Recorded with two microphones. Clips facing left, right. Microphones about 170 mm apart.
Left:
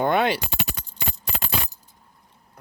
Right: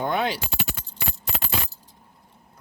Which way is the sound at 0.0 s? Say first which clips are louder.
Left 4 dB; 65° left (ahead or behind).